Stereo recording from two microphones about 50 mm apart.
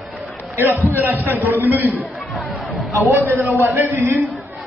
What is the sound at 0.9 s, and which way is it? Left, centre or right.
A man's voice, right.